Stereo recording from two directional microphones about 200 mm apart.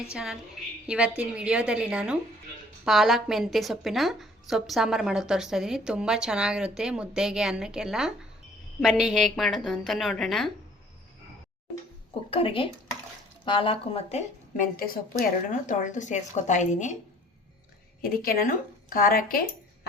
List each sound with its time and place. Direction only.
0.1 s a woman's voice: 5° right (ahead or behind)
12.3 s speech: 25° left (ahead or behind)
18.0 s speech: 45° left (ahead or behind)